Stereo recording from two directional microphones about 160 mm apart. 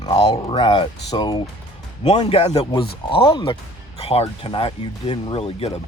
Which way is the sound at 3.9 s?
40° left (ahead or behind).